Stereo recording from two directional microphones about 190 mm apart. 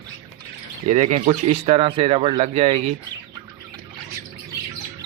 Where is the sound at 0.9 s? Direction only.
35° right (ahead or behind).